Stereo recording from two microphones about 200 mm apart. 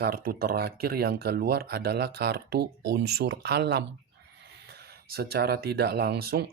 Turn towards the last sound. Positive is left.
turn(degrees=-50)  # may be behind; listen again after turning